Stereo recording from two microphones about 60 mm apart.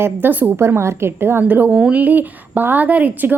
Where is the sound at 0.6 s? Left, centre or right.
Right.